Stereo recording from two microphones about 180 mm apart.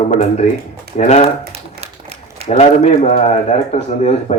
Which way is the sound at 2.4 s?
35° left (ahead or behind).